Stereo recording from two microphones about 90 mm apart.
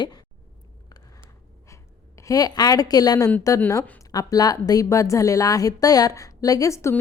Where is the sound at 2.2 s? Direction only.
45° left (ahead or behind).